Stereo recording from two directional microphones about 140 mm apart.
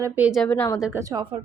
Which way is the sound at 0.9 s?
20° right (ahead or behind).